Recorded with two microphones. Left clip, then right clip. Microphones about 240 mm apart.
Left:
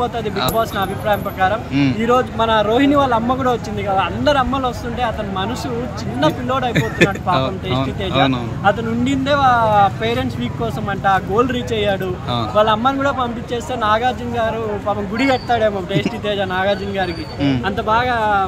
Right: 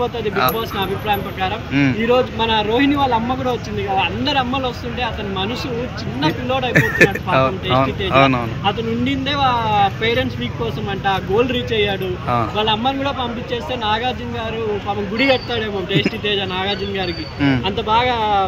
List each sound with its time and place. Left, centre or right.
0.0 s speech: centre